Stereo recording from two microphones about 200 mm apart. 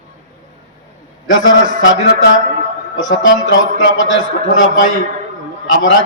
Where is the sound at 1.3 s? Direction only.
70° left (ahead or behind).